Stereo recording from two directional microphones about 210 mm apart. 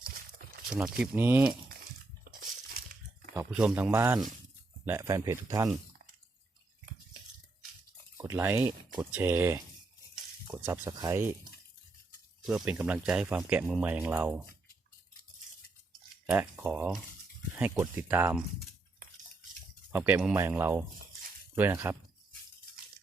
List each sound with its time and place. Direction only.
0.0 s a sound: 40° right (ahead or behind)
0.7 s speech: 5° right (ahead or behind)
2.3 s a sound: 50° right (ahead or behind)
2.7 s crumpling: 45° right (ahead or behind)
3.3 s speech: 5° right (ahead or behind)
8.2 s speech: 10° right (ahead or behind)
12.5 s speech: 5° right (ahead or behind)
16.2 s speech: 10° right (ahead or behind)
19.9 s speech: 10° right (ahead or behind)